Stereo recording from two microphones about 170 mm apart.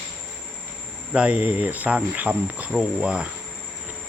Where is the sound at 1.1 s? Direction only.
5° right (ahead or behind).